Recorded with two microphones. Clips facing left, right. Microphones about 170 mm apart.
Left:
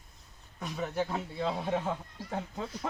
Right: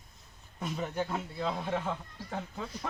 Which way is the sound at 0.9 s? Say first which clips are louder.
Left 1 dB; 10° left (ahead or behind).